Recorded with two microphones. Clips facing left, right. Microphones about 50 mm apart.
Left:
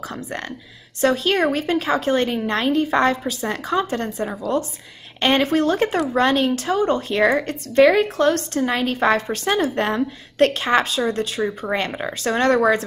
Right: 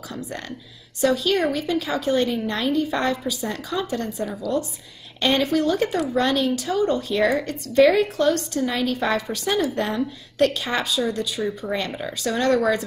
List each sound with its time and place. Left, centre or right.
0.1 s a woman's voice: left